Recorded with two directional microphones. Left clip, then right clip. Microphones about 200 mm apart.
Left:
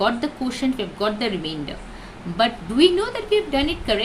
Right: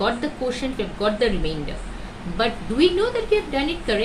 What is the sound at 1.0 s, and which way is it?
A woman's voice, 60° left (ahead or behind).